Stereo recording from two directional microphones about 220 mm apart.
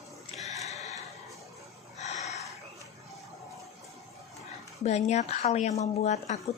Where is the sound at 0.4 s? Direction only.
30° left (ahead or behind).